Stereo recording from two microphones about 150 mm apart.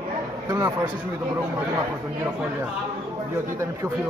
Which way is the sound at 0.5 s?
25° right (ahead or behind).